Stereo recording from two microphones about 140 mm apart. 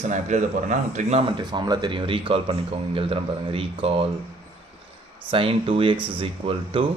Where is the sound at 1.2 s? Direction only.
35° right (ahead or behind).